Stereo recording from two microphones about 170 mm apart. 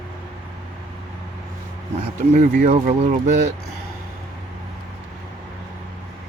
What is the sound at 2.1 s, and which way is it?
Speech, 50° right (ahead or behind).